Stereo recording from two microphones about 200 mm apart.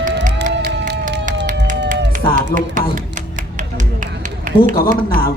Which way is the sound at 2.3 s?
40° right (ahead or behind).